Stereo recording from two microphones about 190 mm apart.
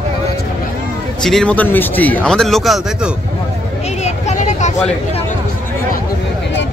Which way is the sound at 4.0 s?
35° left (ahead or behind).